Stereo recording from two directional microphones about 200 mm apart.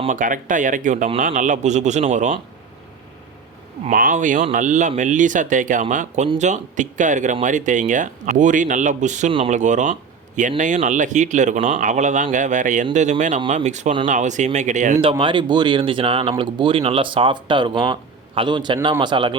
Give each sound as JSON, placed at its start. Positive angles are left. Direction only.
{"t": 0.1, "sound": "speech", "side_deg": -40}
{"t": 3.8, "sound": "speech", "side_deg": -40}
{"t": 15.0, "sound": "speech", "side_deg": -25}